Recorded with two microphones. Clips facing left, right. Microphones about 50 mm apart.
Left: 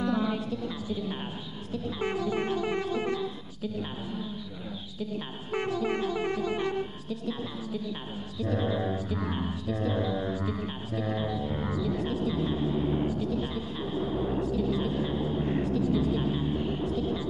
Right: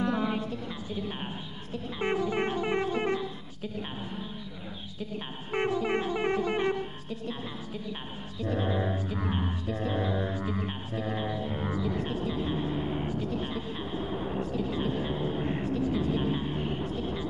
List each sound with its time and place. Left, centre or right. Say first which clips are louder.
0.0 s a sound: even; right
1.7 s music: right 1 dB; right
5.5 s shofar: right 1 dB; right
8.4 s mantra: left 1 dB; right
11.7 s a sound: left 2 dB; right
14.4 s vehicle: left 2 dB; right